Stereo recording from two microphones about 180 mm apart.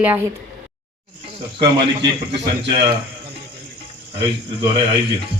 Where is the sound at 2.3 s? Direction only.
30° right (ahead or behind).